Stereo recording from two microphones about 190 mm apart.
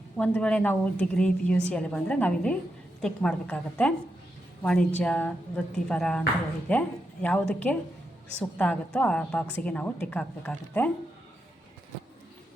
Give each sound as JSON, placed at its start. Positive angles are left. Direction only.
{"t": 0.2, "sound": "a woman's voice", "side_deg": 5}